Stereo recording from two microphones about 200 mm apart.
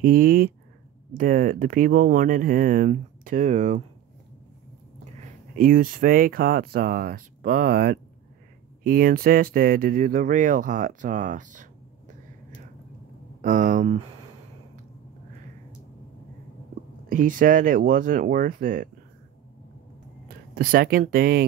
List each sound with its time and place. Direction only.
0.0 s speech: 45° right (ahead or behind)
5.6 s speech: 45° right (ahead or behind)
13.4 s speech: 40° right (ahead or behind)
17.1 s speech: 40° right (ahead or behind)
20.5 s speech: 45° right (ahead or behind)